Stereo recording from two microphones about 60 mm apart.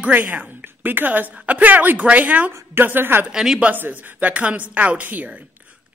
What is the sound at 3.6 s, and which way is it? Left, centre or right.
A woman's voice, right.